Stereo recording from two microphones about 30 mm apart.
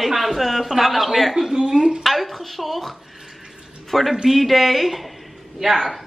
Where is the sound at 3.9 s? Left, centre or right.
Centre.